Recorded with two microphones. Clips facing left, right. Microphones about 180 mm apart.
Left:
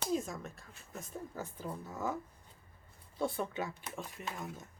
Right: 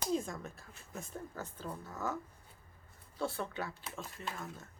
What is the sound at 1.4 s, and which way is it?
Speech, 10° left (ahead or behind).